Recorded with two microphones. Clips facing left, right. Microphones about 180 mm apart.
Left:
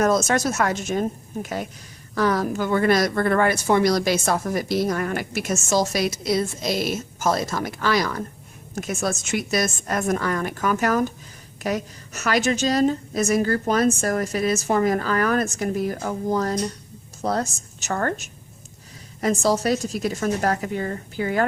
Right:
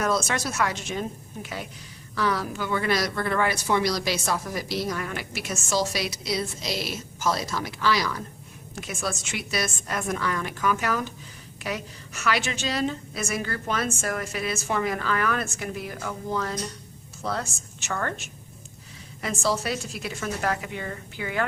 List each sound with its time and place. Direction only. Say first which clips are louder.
0.0 s a woman's voice: left 6 dB; 45° left (ahead or behind)